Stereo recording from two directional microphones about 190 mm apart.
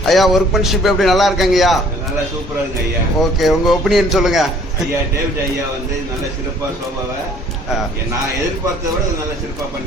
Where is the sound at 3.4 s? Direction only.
Centre (ahead or behind).